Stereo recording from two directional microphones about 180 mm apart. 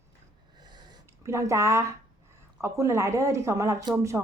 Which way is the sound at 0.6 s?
25° right (ahead or behind).